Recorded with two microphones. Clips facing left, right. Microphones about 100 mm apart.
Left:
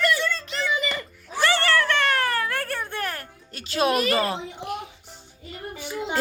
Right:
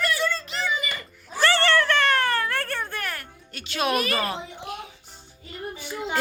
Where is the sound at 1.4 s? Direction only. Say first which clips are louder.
Right 1 dB; 10° left (ahead or behind).